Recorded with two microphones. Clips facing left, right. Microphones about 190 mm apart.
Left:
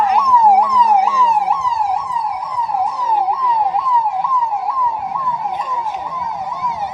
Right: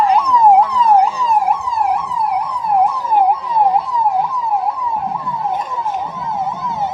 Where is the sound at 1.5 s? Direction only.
55° right (ahead or behind).